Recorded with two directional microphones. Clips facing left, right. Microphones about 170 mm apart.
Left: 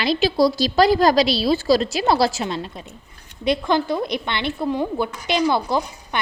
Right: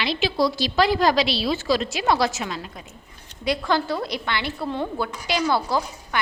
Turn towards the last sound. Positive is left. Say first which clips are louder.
# left 3 dB
turn(degrees=20)  # may be behind; listen again after turning